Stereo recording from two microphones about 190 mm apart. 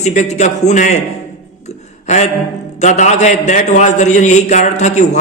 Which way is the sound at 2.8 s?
40° left (ahead or behind).